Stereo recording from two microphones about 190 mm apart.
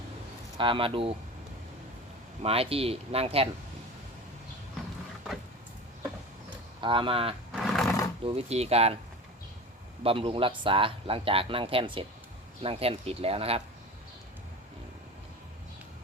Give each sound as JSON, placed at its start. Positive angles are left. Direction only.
{"t": 0.5, "sound": "speech", "side_deg": -25}
{"t": 2.4, "sound": "speech", "side_deg": -30}
{"t": 6.8, "sound": "speech", "side_deg": -25}
{"t": 7.5, "sound": "a sound", "side_deg": 0}
{"t": 8.2, "sound": "speech", "side_deg": -30}
{"t": 10.0, "sound": "speech", "side_deg": -30}